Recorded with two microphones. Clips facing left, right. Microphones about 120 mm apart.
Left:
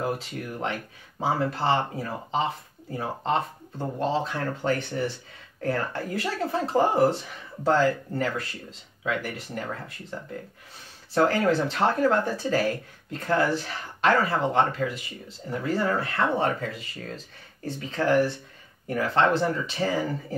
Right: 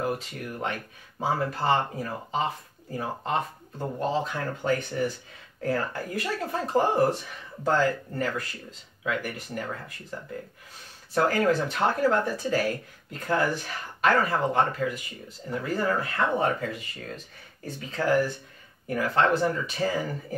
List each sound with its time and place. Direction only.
0.0 s speech: 25° left (ahead or behind)
11.1 s speech: 30° left (ahead or behind)